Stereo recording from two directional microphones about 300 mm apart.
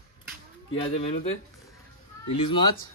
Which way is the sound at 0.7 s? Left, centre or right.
Centre.